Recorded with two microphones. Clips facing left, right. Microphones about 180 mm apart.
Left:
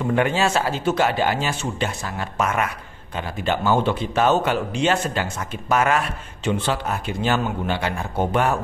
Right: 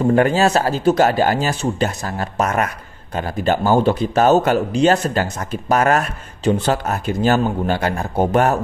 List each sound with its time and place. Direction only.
0.0 s speech: 40° right (ahead or behind)